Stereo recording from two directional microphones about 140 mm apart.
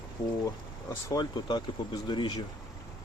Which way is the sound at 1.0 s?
30° left (ahead or behind).